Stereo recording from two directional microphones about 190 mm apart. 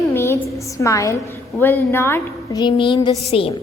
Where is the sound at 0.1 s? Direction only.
10° left (ahead or behind).